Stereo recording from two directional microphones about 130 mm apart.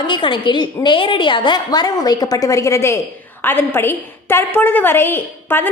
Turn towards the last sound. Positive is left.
turn(degrees=15)  # may be behind; listen again after turning